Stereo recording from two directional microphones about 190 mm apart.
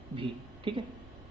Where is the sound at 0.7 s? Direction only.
25° right (ahead or behind).